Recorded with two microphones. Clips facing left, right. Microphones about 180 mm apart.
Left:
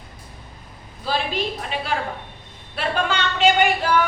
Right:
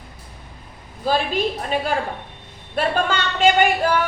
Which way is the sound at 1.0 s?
45° right (ahead or behind).